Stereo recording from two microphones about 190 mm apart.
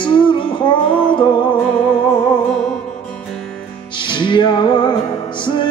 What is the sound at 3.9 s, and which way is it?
Music, 25° left (ahead or behind).